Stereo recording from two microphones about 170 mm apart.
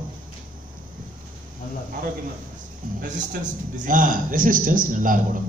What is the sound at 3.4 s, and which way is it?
A man's voice, 50° right (ahead or behind).